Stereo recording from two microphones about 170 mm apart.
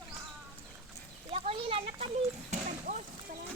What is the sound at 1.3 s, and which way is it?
Speech, 35° right (ahead or behind).